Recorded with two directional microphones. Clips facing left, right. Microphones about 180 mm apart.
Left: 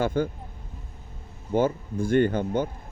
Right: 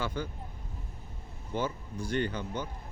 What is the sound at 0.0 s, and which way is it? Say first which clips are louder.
Speech: left 10 dB; 50° left (ahead or behind).